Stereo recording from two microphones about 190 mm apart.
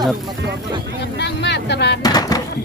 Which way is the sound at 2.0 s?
20° left (ahead or behind).